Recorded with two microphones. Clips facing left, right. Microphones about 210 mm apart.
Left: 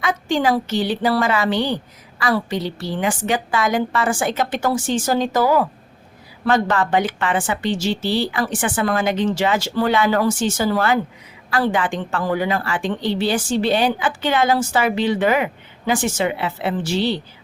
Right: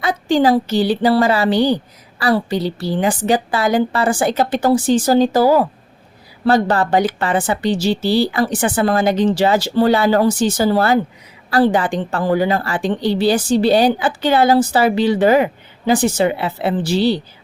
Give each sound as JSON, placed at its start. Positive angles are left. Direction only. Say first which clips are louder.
{"t": 0.0, "sound": "a woman's voice", "louder": "right 5 dB", "side_deg": -35}